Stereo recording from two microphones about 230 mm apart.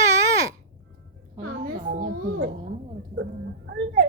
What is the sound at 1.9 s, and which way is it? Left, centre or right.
A child's voice, right.